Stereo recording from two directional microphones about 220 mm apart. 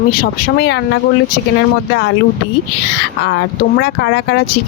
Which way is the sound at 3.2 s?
45° left (ahead or behind).